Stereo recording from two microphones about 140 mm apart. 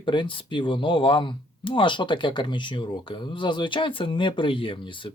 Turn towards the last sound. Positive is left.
turn(degrees=35)  # may be behind; listen again after turning